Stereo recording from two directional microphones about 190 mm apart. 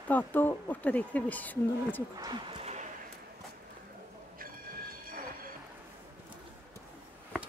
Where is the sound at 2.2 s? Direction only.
25° right (ahead or behind).